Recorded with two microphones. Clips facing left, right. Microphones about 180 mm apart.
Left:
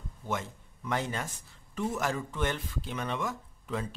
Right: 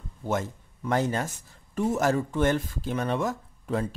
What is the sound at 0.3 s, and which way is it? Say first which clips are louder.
Speech: right 6 dB; 40° right (ahead or behind).